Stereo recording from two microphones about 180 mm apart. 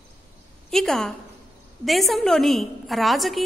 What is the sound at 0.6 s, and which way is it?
A woman's voice, 5° left (ahead or behind).